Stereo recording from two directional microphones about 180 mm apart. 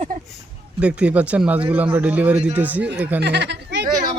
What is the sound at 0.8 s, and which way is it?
Speech, 5° right (ahead or behind).